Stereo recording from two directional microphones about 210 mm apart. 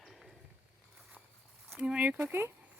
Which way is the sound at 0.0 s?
Centre (ahead or behind).